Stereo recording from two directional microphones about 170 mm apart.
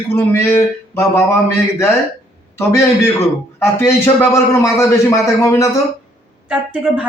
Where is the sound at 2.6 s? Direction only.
15° left (ahead or behind).